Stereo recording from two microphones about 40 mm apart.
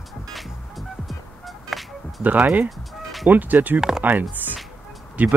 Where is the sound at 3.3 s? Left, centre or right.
Right.